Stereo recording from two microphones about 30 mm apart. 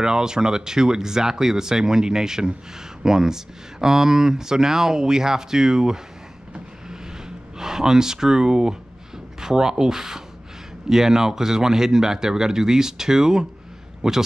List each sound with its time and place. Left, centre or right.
0.0 s speech: right
6.9 s a sound: centre
9.4 s speech: centre